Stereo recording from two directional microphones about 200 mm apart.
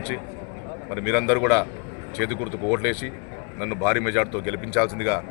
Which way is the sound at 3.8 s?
10° left (ahead or behind).